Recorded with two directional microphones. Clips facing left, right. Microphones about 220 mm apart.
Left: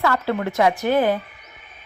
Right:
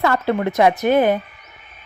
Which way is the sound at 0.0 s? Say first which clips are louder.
Right 3 dB; 20° right (ahead or behind).